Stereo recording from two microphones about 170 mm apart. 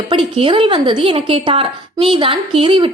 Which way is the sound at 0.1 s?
30° right (ahead or behind).